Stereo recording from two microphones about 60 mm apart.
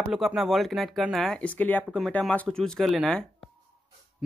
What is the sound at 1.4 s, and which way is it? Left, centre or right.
Speech, left.